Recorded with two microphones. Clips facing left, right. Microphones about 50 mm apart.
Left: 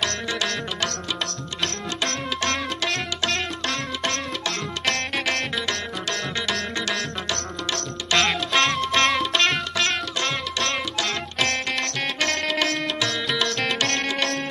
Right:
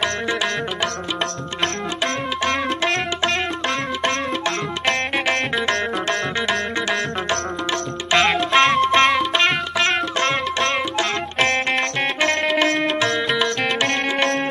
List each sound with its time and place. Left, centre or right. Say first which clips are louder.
2.9 s music: right 5 dB; centre
8.1 s music: right 5 dB; centre
11.0 s music: right 5 dB; right
13.1 s music: right 5 dB; centre